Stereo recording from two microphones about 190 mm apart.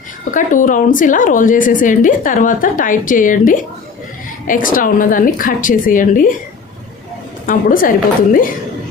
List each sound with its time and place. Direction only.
0.3 s a woman's voice: 45° left (ahead or behind)
7.4 s a woman's voice: 45° left (ahead or behind)